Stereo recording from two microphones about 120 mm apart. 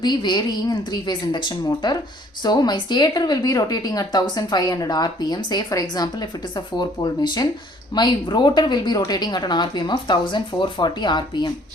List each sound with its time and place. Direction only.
0.0 s a woman's voice: 40° left (ahead or behind)